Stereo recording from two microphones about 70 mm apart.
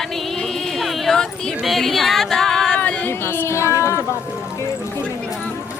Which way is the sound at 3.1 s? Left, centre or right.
Left.